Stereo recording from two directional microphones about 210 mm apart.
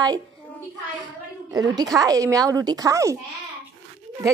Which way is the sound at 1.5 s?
20° right (ahead or behind).